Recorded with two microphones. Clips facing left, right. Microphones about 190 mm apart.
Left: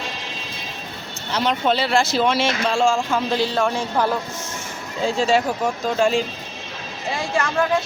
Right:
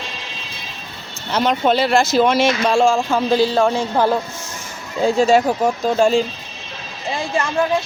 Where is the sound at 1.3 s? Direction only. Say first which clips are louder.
Right 4 dB; 50° right (ahead or behind); by 4.1 s 30° right (ahead or behind).